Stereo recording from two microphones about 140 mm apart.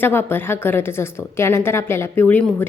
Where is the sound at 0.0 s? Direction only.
15° left (ahead or behind).